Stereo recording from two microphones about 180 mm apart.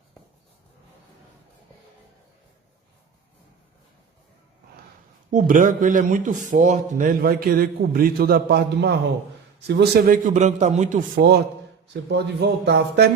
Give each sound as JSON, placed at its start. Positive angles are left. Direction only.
{"t": 5.3, "sound": "a man's voice", "side_deg": -45}
{"t": 10.2, "sound": "a man's voice", "side_deg": -40}
{"t": 12.1, "sound": "speech", "side_deg": -65}